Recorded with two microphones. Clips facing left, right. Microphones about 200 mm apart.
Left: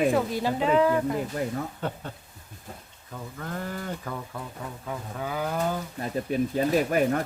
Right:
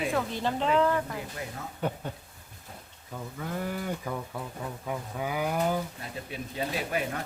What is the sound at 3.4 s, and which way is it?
Speech, 10° right (ahead or behind).